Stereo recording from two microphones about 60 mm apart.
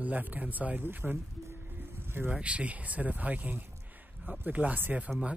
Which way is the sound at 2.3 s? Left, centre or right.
Right.